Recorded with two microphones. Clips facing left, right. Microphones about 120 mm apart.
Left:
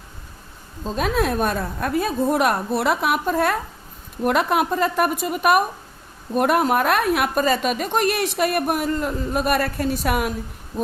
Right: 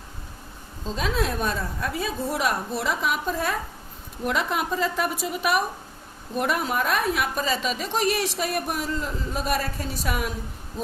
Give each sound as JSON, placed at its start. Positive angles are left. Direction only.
{"t": 0.9, "sound": "a woman's voice", "side_deg": 55}